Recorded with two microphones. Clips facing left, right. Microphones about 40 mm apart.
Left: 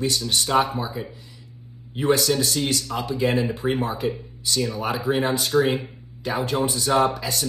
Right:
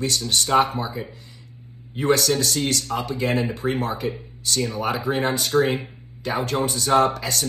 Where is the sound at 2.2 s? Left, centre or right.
Left.